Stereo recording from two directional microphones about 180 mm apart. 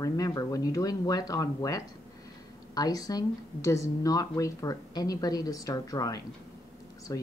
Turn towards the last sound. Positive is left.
turn(degrees=20)  # may be behind; listen again after turning